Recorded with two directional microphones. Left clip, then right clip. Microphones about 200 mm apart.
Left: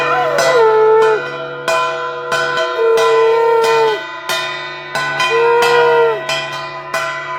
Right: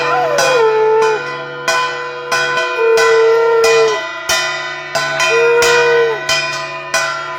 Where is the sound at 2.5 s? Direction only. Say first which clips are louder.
Right 1 dB; 20° right (ahead or behind).